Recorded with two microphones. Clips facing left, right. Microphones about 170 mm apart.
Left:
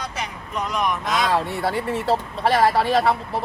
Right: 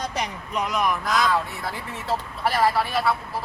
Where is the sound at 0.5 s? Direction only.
5° right (ahead or behind).